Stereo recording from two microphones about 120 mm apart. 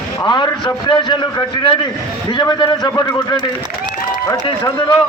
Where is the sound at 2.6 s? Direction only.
40° left (ahead or behind).